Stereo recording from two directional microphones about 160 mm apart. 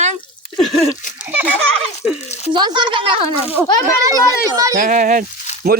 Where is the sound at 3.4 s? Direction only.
10° right (ahead or behind).